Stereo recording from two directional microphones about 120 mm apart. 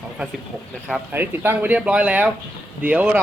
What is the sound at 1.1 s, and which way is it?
Speech, 15° right (ahead or behind).